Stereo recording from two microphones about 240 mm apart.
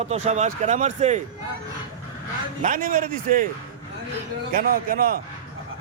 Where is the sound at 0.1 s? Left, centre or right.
Right.